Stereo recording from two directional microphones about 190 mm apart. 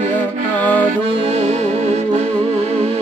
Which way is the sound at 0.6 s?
10° left (ahead or behind).